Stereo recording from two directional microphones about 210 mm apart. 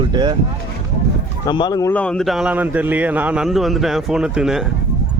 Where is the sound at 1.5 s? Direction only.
20° left (ahead or behind); by 4.6 s 5° right (ahead or behind).